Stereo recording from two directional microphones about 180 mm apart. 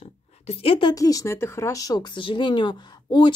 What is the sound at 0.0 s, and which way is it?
Speech, 35° left (ahead or behind).